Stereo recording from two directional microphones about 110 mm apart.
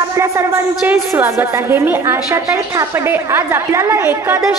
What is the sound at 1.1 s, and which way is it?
A woman's voice, 20° right (ahead or behind).